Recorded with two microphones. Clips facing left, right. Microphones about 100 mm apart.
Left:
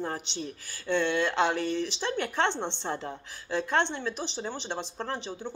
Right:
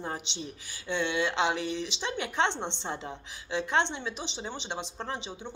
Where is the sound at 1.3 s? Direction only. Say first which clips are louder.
Left 2 dB; 50° left (ahead or behind).